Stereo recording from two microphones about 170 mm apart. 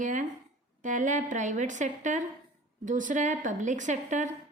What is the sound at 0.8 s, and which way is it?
A woman's voice, 45° right (ahead or behind).